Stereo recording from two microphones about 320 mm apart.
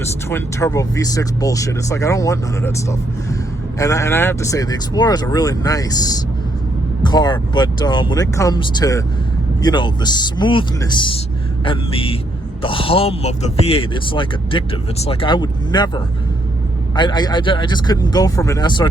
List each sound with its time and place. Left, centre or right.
0.0 s speech: centre
3.8 s speech: centre
16.9 s speech: centre